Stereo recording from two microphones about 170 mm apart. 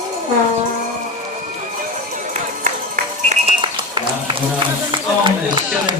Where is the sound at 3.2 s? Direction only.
30° right (ahead or behind).